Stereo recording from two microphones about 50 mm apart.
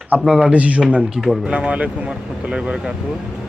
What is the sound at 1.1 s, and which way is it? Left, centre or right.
Speech, centre.